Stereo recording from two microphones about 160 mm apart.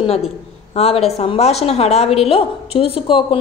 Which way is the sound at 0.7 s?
40° left (ahead or behind).